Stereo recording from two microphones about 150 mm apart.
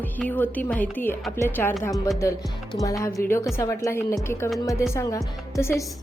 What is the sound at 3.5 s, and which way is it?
Speech, 20° left (ahead or behind).